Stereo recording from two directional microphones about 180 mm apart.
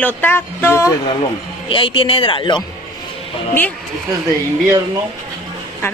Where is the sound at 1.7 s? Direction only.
30° left (ahead or behind).